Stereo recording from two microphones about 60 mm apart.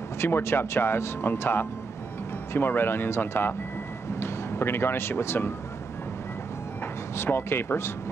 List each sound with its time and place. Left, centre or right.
0.2 s speech: left
7.2 s speech: left